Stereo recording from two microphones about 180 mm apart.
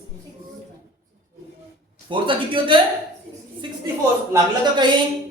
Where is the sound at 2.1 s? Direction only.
30° right (ahead or behind).